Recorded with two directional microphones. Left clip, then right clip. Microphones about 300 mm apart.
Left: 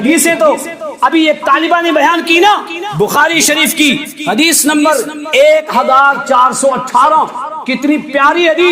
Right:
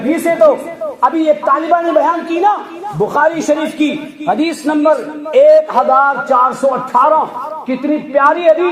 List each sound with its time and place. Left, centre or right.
0.3 s a man's voice: left
2.3 s a man's voice: left